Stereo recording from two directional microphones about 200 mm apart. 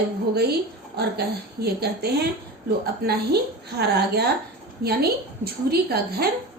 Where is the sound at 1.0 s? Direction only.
55° right (ahead or behind).